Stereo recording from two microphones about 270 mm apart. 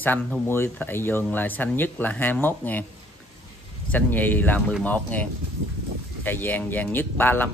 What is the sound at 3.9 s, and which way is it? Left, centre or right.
Speech, centre.